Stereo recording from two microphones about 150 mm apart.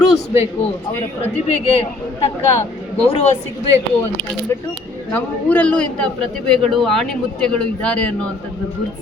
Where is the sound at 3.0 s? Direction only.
40° left (ahead or behind).